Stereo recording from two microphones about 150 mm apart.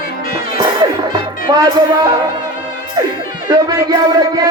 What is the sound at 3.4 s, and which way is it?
Speech, 25° right (ahead or behind).